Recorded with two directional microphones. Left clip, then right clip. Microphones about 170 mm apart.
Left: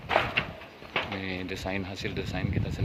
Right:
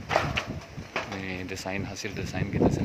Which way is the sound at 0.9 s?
35° right (ahead or behind).